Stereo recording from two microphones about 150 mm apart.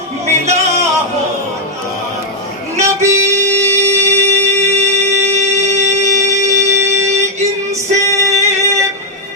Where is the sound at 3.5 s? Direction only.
45° right (ahead or behind).